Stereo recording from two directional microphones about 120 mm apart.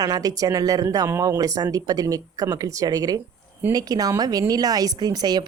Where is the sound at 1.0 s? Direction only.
20° right (ahead or behind).